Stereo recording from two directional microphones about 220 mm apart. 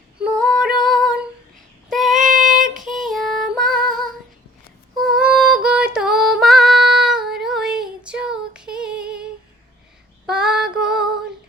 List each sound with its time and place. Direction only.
0.2 s female singing: centre (ahead or behind)
1.9 s child singing: centre (ahead or behind)
2.2 s child singing: 35° right (ahead or behind)
2.6 s female singing: centre (ahead or behind)
5.0 s female singing: 5° right (ahead or behind)
10.2 s female singing: 5° right (ahead or behind)